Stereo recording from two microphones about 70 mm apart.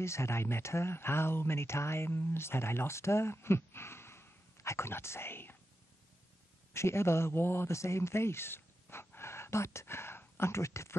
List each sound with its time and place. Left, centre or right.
0.0 s speech: left
6.7 s a man's voice: left